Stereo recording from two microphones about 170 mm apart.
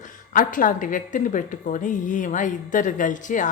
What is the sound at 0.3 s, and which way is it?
A woman's voice, 50° left (ahead or behind).